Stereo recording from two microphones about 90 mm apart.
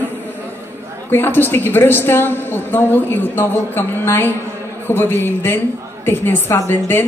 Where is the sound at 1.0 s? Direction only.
25° left (ahead or behind).